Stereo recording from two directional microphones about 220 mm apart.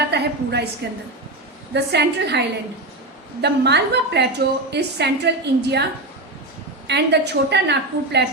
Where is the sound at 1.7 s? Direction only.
50° right (ahead or behind).